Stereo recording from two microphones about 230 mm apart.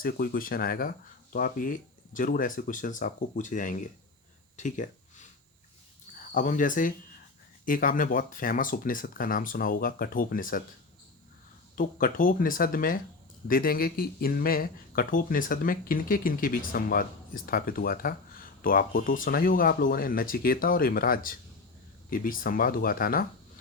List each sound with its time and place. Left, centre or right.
0.0 s speech: left
4.5 s a sound: left
6.3 s speech: left
11.8 s speech: left